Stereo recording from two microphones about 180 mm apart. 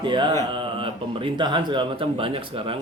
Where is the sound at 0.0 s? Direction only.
25° right (ahead or behind).